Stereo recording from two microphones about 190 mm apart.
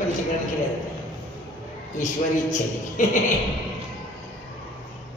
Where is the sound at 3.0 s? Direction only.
40° left (ahead or behind).